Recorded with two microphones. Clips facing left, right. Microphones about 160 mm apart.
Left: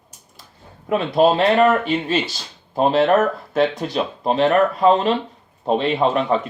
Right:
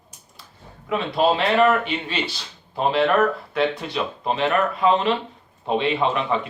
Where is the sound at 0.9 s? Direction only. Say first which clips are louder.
Left 4 dB; 45° left (ahead or behind).